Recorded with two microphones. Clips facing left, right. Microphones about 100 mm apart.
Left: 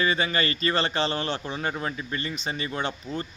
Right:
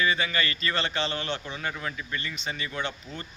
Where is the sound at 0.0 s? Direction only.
35° left (ahead or behind).